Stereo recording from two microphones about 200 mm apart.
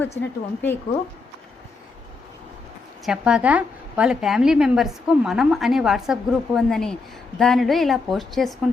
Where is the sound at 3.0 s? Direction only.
5° right (ahead or behind).